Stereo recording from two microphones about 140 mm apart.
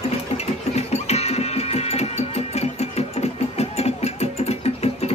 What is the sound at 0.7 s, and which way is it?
Music, 50° left (ahead or behind).